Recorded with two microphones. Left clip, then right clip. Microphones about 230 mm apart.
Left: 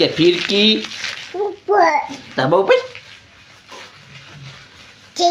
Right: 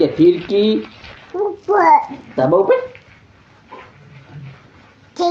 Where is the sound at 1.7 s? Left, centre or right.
Left.